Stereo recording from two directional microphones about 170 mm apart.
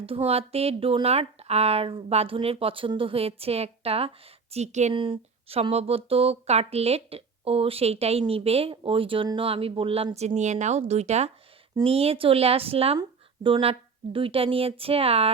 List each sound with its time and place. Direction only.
0.3 s speech: 35° right (ahead or behind)
4.9 s a woman's voice: 30° right (ahead or behind)